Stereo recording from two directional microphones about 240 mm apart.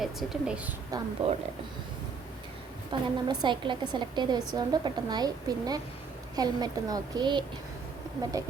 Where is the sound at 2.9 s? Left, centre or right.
Centre.